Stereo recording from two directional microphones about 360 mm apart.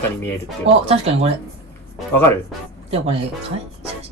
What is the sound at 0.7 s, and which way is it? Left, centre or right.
Speech, centre.